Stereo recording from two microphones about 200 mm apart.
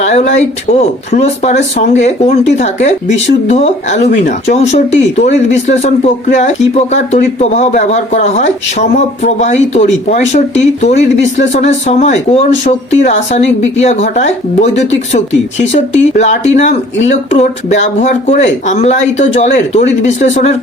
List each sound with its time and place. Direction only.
0.0 s speech: 35° left (ahead or behind)